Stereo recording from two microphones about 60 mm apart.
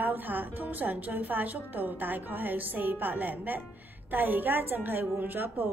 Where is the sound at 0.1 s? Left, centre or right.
Right.